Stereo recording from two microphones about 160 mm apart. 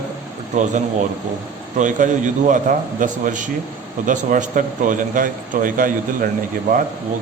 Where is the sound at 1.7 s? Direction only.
50° right (ahead or behind).